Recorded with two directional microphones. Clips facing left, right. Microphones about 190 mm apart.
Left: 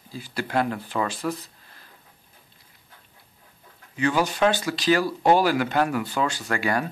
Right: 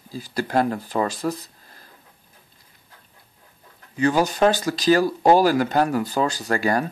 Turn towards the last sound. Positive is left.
turn(degrees=-40)  # may be behind; listen again after turning